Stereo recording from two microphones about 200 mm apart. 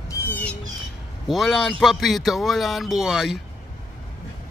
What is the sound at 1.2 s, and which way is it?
A man's voice, centre (ahead or behind).